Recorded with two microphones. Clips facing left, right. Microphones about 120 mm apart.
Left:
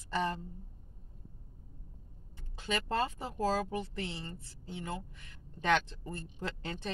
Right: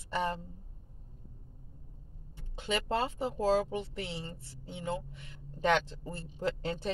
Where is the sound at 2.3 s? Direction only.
25° right (ahead or behind).